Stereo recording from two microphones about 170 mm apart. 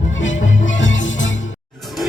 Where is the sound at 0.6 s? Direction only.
90° left.